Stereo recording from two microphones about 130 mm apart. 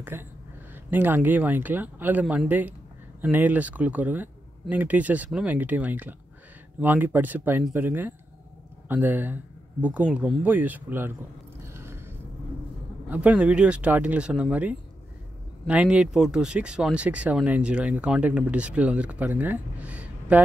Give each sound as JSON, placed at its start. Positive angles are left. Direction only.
{"t": 0.1, "sound": "speech", "side_deg": -15}
{"t": 11.6, "sound": "a sound", "side_deg": -20}
{"t": 13.1, "sound": "speech", "side_deg": -10}